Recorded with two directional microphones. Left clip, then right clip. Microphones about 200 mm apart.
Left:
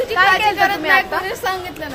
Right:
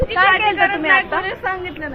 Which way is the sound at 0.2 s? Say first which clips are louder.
Even; 10° right (ahead or behind).